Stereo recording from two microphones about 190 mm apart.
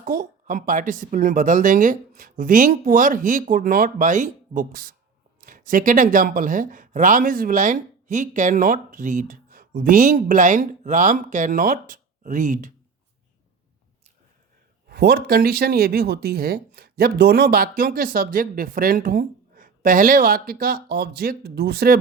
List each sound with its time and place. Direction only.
0.0 s speech: 45° right (ahead or behind)
14.8 s speech: 55° right (ahead or behind)